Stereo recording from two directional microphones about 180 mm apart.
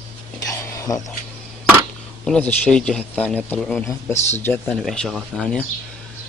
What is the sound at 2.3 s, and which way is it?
A man's voice, 10° left (ahead or behind).